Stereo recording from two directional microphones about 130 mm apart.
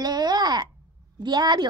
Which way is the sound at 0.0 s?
30° right (ahead or behind).